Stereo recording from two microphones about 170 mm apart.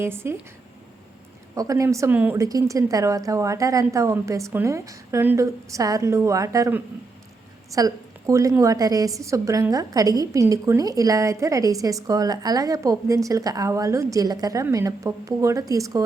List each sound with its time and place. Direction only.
0.0 s a woman's voice: 15° right (ahead or behind)
1.5 s a woman's voice: 20° right (ahead or behind)